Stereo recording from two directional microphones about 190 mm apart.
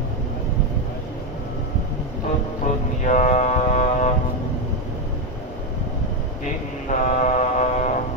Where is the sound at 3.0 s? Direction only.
40° left (ahead or behind).